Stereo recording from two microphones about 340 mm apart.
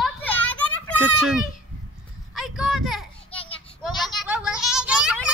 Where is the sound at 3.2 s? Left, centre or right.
Centre.